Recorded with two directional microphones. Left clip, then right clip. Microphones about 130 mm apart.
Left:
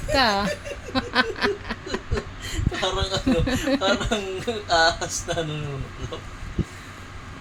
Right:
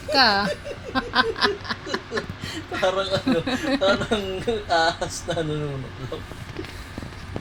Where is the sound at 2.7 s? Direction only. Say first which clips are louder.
Right 3 dB; 45° left (ahead or behind).